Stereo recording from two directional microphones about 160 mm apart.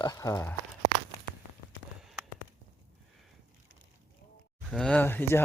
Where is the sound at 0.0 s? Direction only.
20° left (ahead or behind).